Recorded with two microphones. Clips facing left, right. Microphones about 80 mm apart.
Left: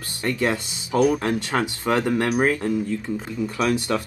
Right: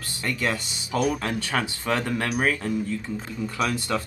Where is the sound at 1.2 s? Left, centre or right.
Left.